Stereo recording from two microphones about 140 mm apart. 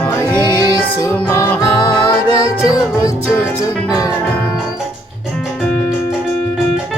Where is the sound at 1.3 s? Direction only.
20° left (ahead or behind).